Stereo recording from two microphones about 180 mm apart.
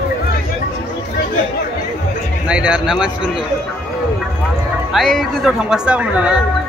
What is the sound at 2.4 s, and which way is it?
Speech, 5° right (ahead or behind).